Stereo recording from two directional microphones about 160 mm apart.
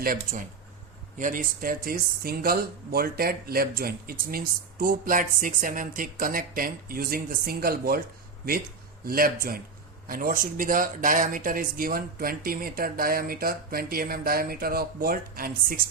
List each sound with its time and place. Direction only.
0.0 s speech: 60° right (ahead or behind)
9.0 s speech: 65° right (ahead or behind)